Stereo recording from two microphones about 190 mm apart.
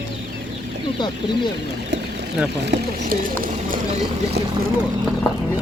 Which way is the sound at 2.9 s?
45° right (ahead or behind).